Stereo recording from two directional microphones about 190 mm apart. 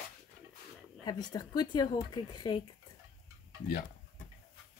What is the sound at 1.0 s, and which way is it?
Speech, 20° left (ahead or behind).